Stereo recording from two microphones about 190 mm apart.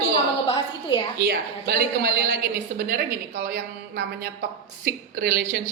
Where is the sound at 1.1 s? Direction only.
55° right (ahead or behind).